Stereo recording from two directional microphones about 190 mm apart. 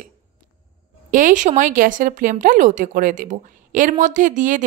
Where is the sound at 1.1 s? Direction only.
40° right (ahead or behind).